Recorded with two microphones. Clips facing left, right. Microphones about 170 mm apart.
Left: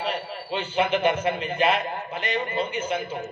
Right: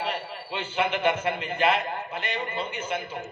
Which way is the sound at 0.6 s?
20° left (ahead or behind).